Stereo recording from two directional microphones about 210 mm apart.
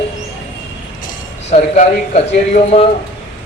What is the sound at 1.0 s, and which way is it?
Speech, 30° left (ahead or behind).